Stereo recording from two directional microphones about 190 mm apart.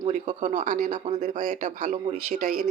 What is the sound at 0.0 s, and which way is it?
A woman's voice, 40° right (ahead or behind).